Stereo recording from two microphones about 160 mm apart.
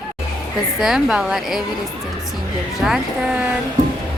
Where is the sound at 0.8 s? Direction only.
5° right (ahead or behind).